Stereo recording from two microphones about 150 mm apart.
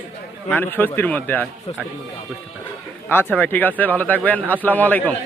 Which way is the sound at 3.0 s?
15° left (ahead or behind).